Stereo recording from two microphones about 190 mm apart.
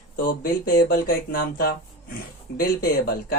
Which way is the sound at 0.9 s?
50° left (ahead or behind).